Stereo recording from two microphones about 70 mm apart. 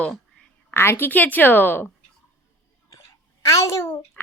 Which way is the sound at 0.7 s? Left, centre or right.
Left.